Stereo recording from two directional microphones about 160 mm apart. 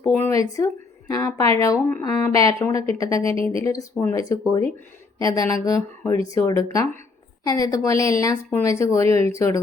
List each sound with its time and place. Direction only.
0.0 s speech: 15° left (ahead or behind)